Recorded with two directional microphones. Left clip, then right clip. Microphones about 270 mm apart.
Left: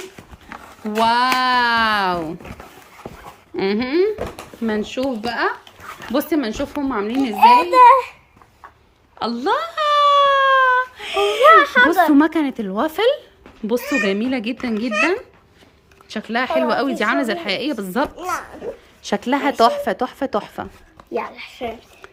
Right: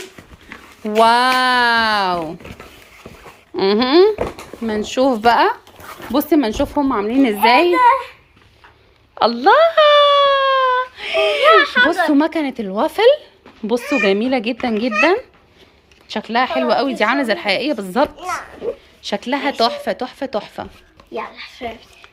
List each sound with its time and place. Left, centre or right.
0.5 s speech: centre
3.5 s speech: centre
7.8 s speech: left
9.1 s a sound: centre
11.4 s a sound: left
12.1 s a woman's voice: centre
16.0 s a woman's voice: centre
18.2 s speech: left
19.0 s a woman's voice: centre
21.1 s speech: left